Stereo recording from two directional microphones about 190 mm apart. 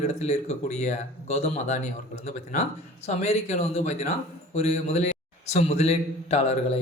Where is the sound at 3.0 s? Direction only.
35° left (ahead or behind).